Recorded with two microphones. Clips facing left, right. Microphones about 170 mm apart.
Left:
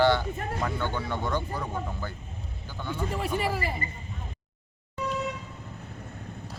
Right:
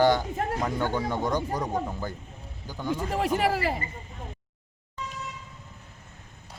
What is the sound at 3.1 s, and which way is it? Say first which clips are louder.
Speech: right 4 dB; 90° right.